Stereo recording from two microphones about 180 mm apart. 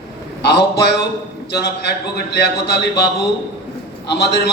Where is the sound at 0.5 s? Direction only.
65° left (ahead or behind).